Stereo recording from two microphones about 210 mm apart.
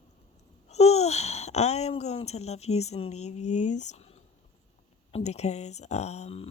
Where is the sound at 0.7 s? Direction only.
30° left (ahead or behind).